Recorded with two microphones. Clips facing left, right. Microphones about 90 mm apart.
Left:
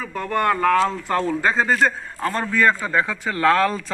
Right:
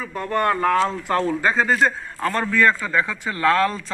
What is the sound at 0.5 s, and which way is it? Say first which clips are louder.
Speech: left 2 dB; 30° right (ahead or behind).